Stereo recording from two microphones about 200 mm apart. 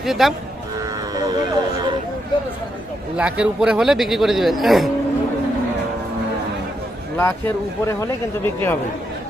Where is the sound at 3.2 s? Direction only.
5° right (ahead or behind).